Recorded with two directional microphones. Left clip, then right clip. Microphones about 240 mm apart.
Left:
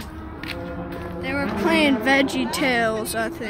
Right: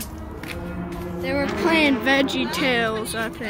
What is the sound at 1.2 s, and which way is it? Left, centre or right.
Music, centre.